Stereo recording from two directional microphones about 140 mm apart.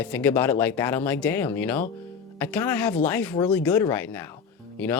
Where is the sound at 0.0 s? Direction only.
10° left (ahead or behind).